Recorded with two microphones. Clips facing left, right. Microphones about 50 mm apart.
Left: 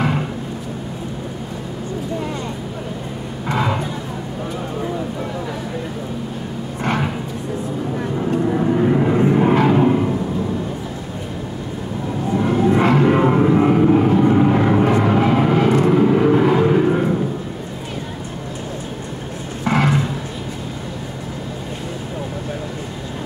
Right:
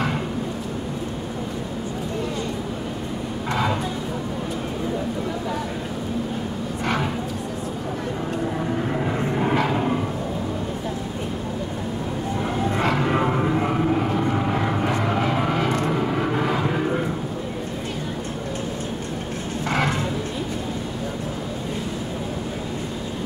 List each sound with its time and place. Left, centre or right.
8.3 s vehicle: centre
12.4 s music: centre
15.8 s vehicle: centre
19.7 s a sound: left